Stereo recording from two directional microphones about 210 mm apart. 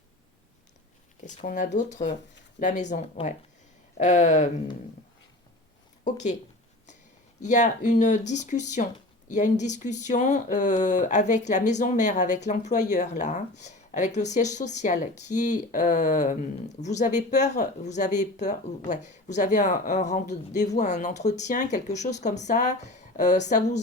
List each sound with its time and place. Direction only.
1.2 s speech: 35° left (ahead or behind)
6.1 s speech: 35° left (ahead or behind)
7.4 s speech: 35° left (ahead or behind)